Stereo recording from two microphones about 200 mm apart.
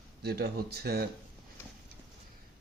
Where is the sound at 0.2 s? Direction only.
50° right (ahead or behind).